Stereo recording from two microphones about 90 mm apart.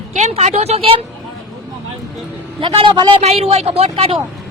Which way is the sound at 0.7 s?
90° right.